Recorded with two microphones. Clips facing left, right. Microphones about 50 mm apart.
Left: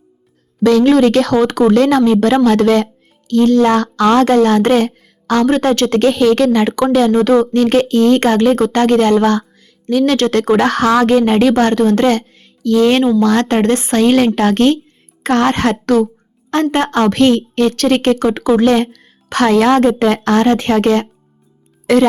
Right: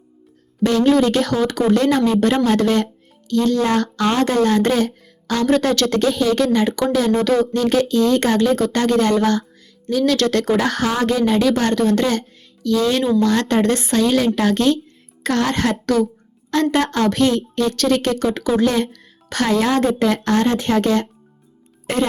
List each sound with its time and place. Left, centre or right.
0.6 s speech: left
1.7 s speech: left
3.2 s speech: left
4.3 s speech: left
6.0 s speech: left
9.4 s music: left
10.1 s speech: left
10.5 s speech: left
18.6 s speech: left
21.9 s a woman's voice: left